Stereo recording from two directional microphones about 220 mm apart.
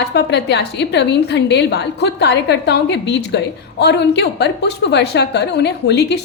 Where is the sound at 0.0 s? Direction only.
50° left (ahead or behind).